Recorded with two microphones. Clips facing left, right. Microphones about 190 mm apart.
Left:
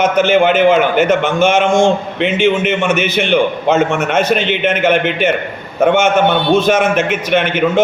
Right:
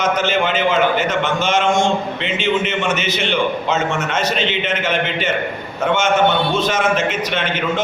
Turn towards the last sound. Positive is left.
turn(degrees=60)  # may be behind; listen again after turning